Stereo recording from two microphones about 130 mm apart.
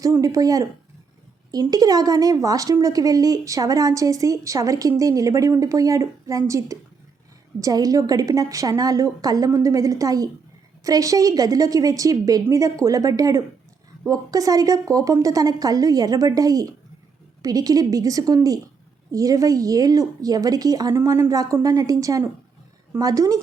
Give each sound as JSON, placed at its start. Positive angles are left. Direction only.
{"t": 0.0, "sound": "a woman's voice", "side_deg": -25}